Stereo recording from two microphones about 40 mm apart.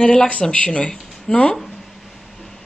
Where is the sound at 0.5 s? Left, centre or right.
Left.